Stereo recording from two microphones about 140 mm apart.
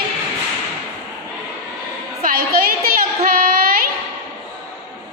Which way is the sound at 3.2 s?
90° right.